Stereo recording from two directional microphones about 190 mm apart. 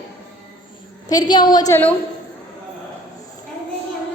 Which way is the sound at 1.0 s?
20° left (ahead or behind).